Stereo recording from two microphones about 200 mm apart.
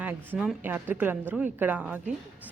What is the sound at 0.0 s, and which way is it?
A woman's voice, 10° right (ahead or behind).